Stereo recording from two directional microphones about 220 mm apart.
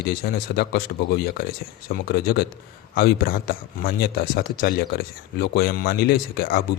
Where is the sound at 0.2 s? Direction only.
45° left (ahead or behind).